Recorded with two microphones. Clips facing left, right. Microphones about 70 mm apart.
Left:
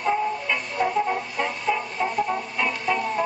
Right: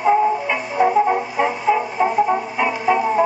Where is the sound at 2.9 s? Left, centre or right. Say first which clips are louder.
Right 8 dB; centre.